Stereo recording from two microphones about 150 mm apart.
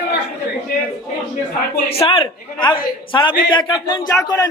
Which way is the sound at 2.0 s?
35° left (ahead or behind).